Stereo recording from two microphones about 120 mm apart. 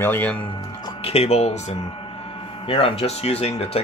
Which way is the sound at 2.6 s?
50° left (ahead or behind).